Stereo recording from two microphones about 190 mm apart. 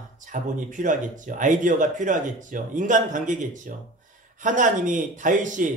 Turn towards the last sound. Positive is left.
turn(degrees=-40)  # may be behind; listen again after turning